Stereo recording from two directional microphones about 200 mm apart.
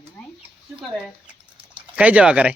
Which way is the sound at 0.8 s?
5° right (ahead or behind).